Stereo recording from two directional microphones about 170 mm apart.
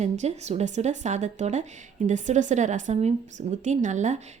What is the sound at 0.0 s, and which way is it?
A woman's voice, 40° right (ahead or behind).